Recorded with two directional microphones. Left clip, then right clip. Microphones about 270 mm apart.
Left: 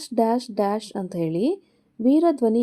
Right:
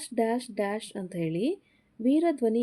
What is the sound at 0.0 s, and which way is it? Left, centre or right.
Speech, centre.